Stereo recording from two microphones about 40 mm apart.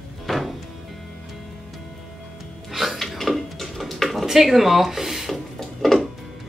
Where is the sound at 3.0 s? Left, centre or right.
Centre.